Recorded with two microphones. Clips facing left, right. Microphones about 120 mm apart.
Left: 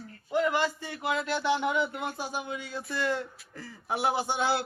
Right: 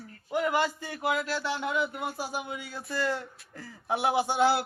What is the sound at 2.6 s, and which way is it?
Speech, 20° left (ahead or behind).